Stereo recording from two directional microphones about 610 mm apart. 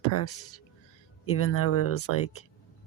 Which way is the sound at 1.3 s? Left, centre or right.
Left.